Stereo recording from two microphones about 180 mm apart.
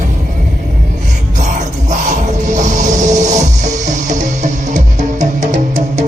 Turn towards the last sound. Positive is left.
turn(degrees=-40)  # may be behind; listen again after turning